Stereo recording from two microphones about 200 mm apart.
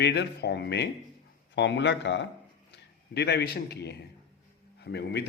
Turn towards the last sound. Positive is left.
turn(degrees=55)  # may be behind; listen again after turning